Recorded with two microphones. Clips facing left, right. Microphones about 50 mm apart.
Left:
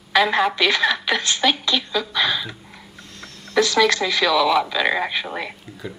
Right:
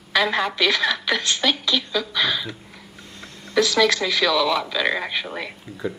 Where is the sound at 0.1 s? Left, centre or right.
Centre.